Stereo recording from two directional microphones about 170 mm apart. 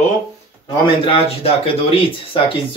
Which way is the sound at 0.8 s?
30° left (ahead or behind).